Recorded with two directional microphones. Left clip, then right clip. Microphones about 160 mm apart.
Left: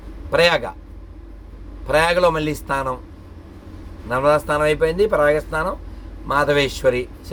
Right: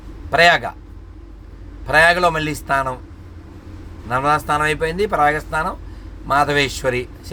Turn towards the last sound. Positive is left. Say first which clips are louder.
# left 1 dB
turn(degrees=-15)  # may be behind; listen again after turning